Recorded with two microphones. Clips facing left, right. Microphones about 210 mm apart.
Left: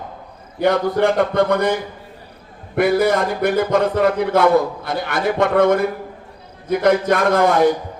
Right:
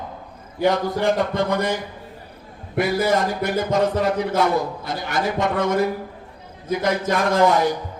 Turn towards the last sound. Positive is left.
turn(degrees=55)  # may be behind; listen again after turning